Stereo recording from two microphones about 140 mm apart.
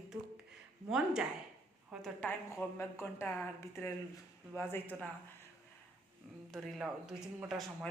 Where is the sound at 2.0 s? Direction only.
10° left (ahead or behind).